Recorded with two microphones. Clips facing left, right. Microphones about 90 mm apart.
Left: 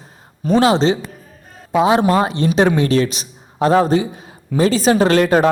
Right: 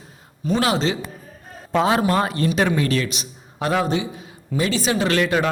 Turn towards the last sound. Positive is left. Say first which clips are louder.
# left 6 dB
turn(degrees=40)  # may be behind; listen again after turning